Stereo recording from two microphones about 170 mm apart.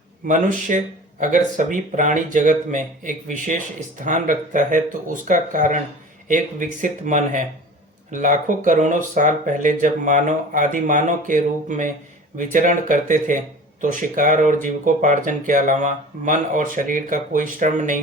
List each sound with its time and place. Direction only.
0.3 s speech: 50° right (ahead or behind)